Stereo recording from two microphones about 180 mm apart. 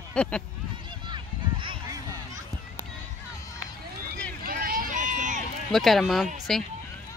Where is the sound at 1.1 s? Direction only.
30° right (ahead or behind).